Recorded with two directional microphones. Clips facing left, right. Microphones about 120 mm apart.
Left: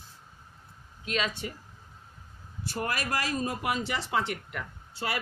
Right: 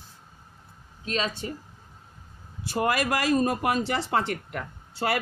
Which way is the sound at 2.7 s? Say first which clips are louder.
Right 7 dB; 80° right.